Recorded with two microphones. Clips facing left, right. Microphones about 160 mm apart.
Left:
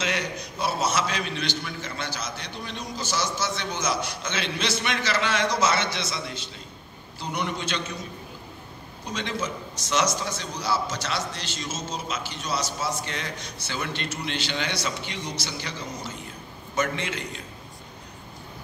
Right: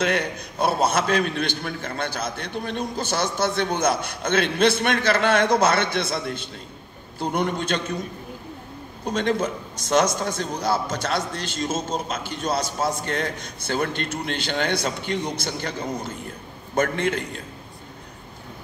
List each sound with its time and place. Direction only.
0.0 s a man's voice: 55° right (ahead or behind)
9.0 s a man's voice: 50° right (ahead or behind)